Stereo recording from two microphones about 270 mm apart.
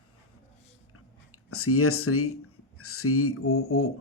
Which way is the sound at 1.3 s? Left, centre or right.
Left.